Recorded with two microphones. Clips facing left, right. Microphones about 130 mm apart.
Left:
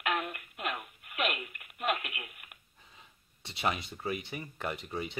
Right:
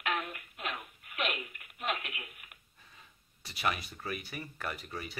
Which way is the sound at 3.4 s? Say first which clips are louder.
Left 1 dB; 25° left (ahead or behind).